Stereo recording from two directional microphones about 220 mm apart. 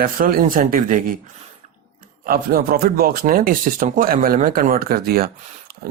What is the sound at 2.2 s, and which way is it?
Speech, 40° right (ahead or behind).